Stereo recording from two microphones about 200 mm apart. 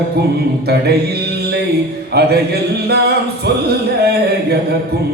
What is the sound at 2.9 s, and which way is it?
Music, 55° right (ahead or behind).